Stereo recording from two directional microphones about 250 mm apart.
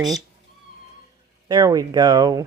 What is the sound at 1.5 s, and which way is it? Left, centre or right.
Speech, centre.